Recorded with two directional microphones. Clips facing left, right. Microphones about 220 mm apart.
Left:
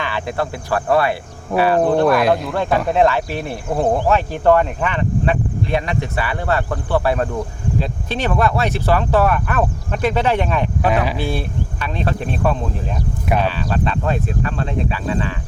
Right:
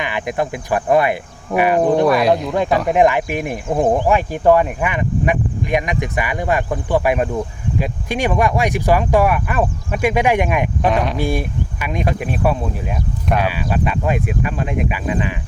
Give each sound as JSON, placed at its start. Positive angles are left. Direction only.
{"t": 0.0, "sound": "cricket", "side_deg": -15}
{"t": 1.5, "sound": "speech", "side_deg": -15}
{"t": 2.0, "sound": "speech", "side_deg": 0}
{"t": 2.5, "sound": "speech", "side_deg": -15}
{"t": 10.8, "sound": "speech", "side_deg": 5}
{"t": 11.2, "sound": "speech", "side_deg": -15}